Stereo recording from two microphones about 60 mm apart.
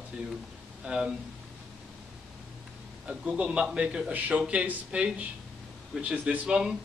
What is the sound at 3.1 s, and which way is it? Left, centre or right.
A man's voice, centre.